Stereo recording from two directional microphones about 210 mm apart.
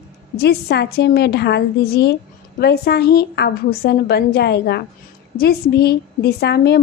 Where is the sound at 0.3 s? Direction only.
50° left (ahead or behind).